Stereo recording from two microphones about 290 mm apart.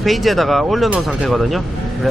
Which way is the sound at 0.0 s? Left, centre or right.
Centre.